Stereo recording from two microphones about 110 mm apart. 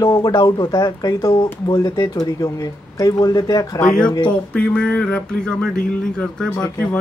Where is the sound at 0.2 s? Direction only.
35° left (ahead or behind).